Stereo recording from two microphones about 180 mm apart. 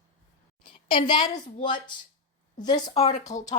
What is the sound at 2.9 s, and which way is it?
Speech, 40° left (ahead or behind).